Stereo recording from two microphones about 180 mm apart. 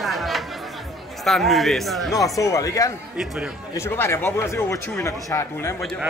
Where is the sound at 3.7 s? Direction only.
15° left (ahead or behind).